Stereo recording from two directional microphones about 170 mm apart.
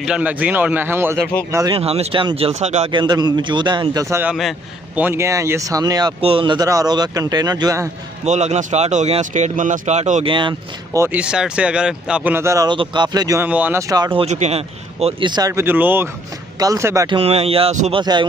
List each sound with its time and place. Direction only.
0.0 s speech: 5° right (ahead or behind)
1.8 s speech: 35° right (ahead or behind)
2.9 s speech: 25° right (ahead or behind)
4.4 s a man's voice: centre (ahead or behind)
5.0 s speech: 15° right (ahead or behind)
8.3 s speech: 40° right (ahead or behind)
10.2 s speech: 30° right (ahead or behind)
11.0 s speech: 10° right (ahead or behind)
13.5 s speech: 10° right (ahead or behind)
14.1 s speech: 40° right (ahead or behind); by 17.2 s 20° right (ahead or behind)
17.2 s speech: 35° right (ahead or behind)